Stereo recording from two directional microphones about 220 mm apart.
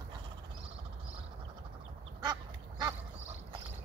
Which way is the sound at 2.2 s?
20° right (ahead or behind).